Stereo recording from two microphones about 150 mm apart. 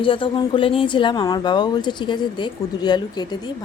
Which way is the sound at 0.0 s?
35° left (ahead or behind).